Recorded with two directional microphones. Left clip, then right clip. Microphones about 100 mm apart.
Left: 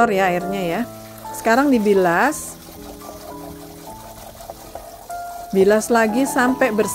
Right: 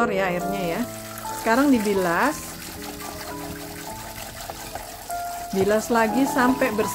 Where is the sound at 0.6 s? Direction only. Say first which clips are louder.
Left 4 dB; 75° left (ahead or behind).